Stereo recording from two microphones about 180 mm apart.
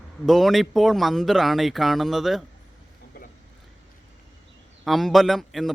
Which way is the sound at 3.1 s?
60° left (ahead or behind).